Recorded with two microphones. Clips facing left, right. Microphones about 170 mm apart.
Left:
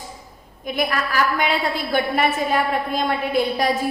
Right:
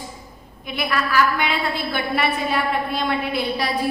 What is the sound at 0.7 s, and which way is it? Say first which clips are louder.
A woman's voice: even; 45° left (ahead or behind).